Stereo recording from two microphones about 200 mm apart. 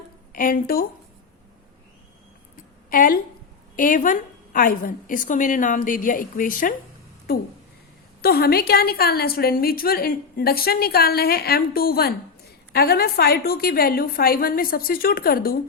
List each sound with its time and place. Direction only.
0.3 s a woman's voice: 45° left (ahead or behind)
2.9 s a sound: 45° left (ahead or behind)
3.8 s a woman's voice: 40° left (ahead or behind)
8.2 s a woman's voice: 50° left (ahead or behind)